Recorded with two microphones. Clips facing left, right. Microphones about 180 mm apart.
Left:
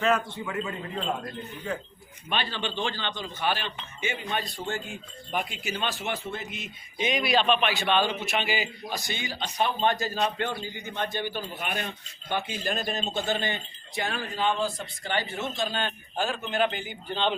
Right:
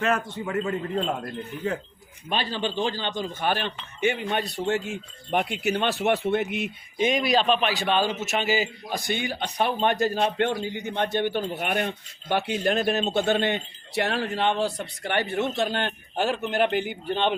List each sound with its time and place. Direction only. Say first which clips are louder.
0.4 s a man's voice: right 5 dB; 45° right (ahead or behind)
2.3 s a man's voice: right 3 dB; 40° right (ahead or behind); by 17.3 s 60° right (ahead or behind)